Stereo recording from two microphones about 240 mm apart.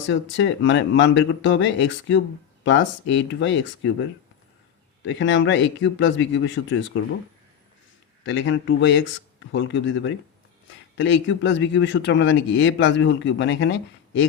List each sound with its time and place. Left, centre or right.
0.1 s speech: left
5.0 s speech: left
8.2 s speech: left